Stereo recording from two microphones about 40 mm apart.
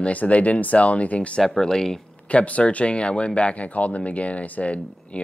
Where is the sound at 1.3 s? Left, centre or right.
Centre.